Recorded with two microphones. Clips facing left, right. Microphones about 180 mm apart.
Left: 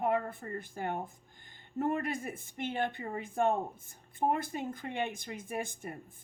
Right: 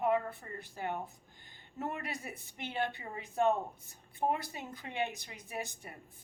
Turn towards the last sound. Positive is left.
turn(degrees=50)  # may be behind; listen again after turning